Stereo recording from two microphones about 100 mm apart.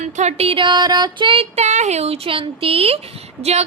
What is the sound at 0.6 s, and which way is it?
Music, 45° right (ahead or behind).